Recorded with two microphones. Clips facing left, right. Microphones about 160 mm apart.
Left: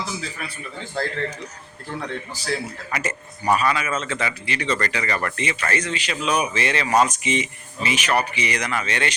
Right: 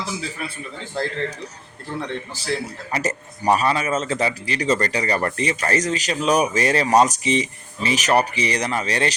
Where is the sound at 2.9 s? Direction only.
35° right (ahead or behind).